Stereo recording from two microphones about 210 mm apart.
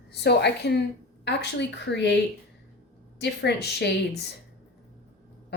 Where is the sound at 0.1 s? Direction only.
50° left (ahead or behind).